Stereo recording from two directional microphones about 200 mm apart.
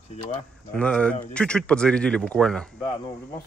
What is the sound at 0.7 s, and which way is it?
A man's voice, 5° left (ahead or behind).